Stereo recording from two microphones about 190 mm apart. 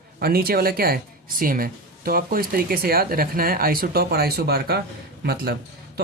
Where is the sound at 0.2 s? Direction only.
55° right (ahead or behind).